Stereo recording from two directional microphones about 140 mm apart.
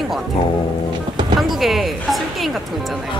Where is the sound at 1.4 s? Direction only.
Centre (ahead or behind).